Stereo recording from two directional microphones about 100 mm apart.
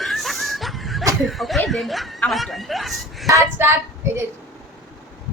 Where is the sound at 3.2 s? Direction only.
30° right (ahead or behind).